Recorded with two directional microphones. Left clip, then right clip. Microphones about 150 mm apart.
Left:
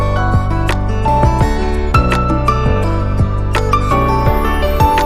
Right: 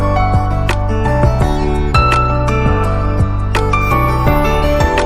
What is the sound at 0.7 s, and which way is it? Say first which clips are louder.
Music: left 3 dB; centre (ahead or behind).